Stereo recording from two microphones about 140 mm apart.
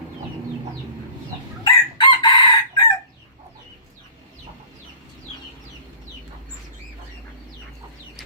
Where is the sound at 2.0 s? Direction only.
35° left (ahead or behind).